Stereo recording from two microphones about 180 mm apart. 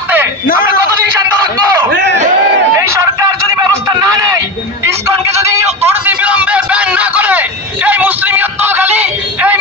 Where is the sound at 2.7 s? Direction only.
15° right (ahead or behind).